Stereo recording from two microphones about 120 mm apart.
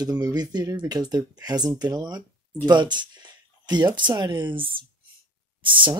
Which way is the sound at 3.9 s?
40° right (ahead or behind).